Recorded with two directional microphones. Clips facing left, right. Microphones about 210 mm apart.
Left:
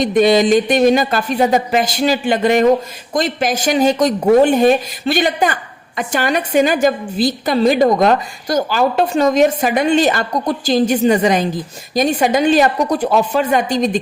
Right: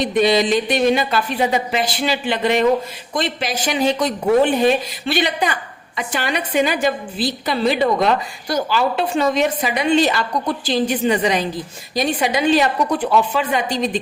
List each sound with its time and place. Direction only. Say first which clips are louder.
0.0 s a woman's voice: left 4 dB; 45° left (ahead or behind)